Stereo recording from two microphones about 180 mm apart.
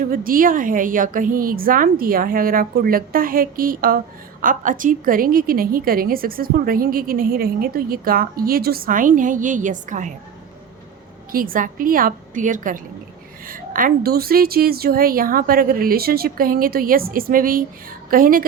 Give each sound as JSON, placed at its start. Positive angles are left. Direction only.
{"t": 0.0, "sound": "a woman's voice", "side_deg": -50}
{"t": 11.3, "sound": "a woman's voice", "side_deg": -50}